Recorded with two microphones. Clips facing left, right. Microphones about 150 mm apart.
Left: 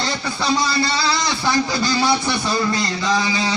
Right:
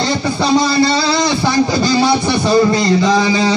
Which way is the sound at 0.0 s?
25° right (ahead or behind).